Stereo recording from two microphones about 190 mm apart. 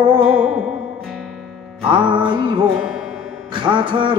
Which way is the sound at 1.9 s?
25° right (ahead or behind).